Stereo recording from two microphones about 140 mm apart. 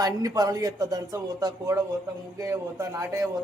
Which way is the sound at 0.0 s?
25° right (ahead or behind).